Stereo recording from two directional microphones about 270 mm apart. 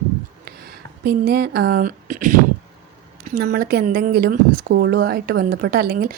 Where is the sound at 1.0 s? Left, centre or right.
Right.